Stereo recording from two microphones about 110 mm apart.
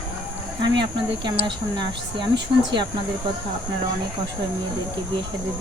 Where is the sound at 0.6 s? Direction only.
45° right (ahead or behind).